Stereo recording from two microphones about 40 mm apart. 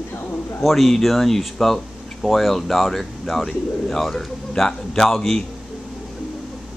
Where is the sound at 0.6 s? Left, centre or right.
Centre.